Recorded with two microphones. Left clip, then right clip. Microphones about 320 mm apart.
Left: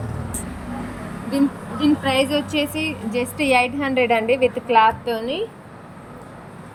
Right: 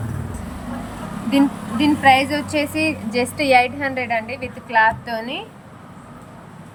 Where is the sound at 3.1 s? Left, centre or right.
Centre.